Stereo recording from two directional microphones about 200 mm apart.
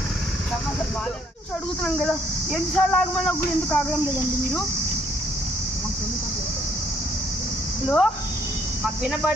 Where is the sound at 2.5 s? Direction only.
Centre (ahead or behind).